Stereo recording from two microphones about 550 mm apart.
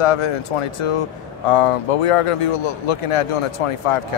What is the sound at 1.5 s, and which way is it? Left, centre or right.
Speech, left.